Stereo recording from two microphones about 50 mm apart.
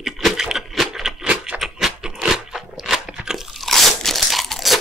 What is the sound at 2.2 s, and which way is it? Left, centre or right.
Crunch, centre.